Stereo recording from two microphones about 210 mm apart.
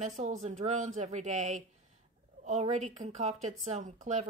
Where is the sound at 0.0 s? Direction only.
35° right (ahead or behind).